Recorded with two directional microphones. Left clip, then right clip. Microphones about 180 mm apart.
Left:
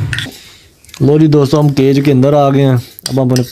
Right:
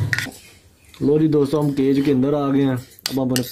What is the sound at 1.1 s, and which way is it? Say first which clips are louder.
Speech: left 7 dB; 45° left (ahead or behind).